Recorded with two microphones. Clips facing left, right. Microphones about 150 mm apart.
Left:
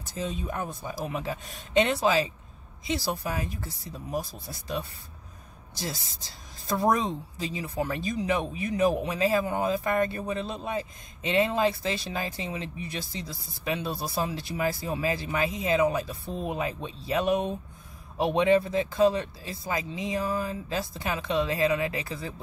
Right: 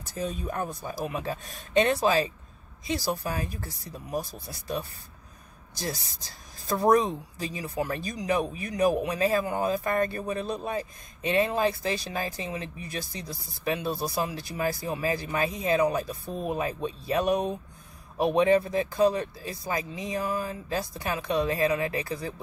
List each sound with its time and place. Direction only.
0.4 s speech: 20° left (ahead or behind)
3.8 s speech: 20° right (ahead or behind)
4.2 s speech: 20° left (ahead or behind)
6.9 s speech: 20° left (ahead or behind)
16.1 s speech: 15° right (ahead or behind)
16.4 s speech: 20° left (ahead or behind)